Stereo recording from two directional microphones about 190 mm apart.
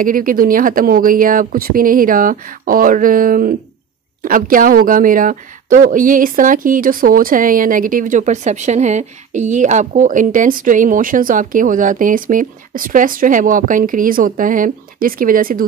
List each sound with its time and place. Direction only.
0.0 s speech: 45° right (ahead or behind)